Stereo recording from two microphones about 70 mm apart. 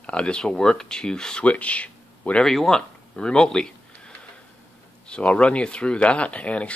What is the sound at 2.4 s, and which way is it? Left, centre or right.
Speech, centre.